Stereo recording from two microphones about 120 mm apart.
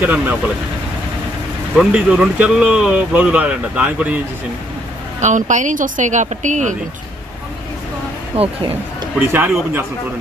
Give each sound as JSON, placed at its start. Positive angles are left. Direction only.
{"t": 0.0, "sound": "speech", "side_deg": -10}
{"t": 1.8, "sound": "speech", "side_deg": -10}
{"t": 5.2, "sound": "speech", "side_deg": -90}
{"t": 8.3, "sound": "speech", "side_deg": -60}
{"t": 9.2, "sound": "a man's voice", "side_deg": -20}